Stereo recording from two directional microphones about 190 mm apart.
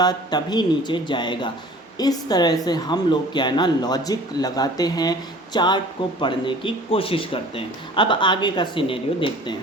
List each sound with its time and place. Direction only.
0.0 s speech: 20° left (ahead or behind)